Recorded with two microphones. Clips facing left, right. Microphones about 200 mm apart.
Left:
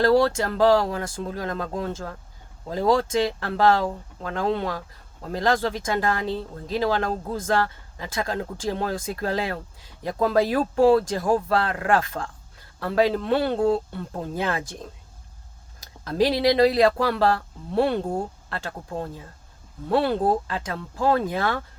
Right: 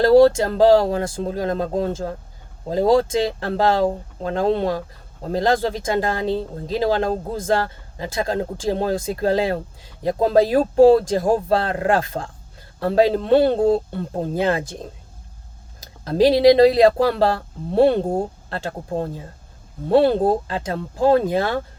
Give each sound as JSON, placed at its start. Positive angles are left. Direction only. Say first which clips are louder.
{"t": 0.0, "sound": "speech", "louder": "right 7 dB", "side_deg": -35}
{"t": 16.0, "sound": "speech", "louder": "right 7 dB", "side_deg": -35}